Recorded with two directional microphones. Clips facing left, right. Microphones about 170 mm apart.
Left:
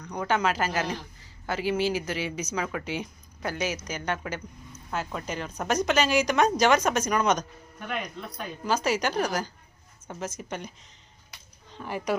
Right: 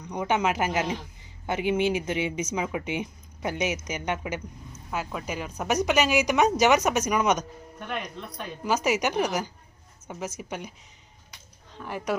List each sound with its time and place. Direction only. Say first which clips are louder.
0.0 s speech: right 1 dB; 20° right (ahead or behind)
8.6 s speech: right 1 dB; 15° right (ahead or behind)
11.3 s a sound: left 1 dB; centre (ahead or behind)